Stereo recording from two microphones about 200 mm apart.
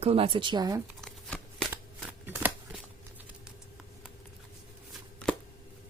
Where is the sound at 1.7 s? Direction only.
10° right (ahead or behind).